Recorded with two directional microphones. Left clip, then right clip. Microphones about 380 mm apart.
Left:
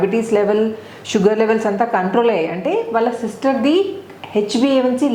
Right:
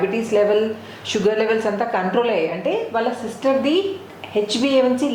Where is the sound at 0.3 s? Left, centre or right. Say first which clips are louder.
Right 1 dB; left.